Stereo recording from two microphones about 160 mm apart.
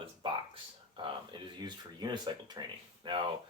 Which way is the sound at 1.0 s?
30° right (ahead or behind).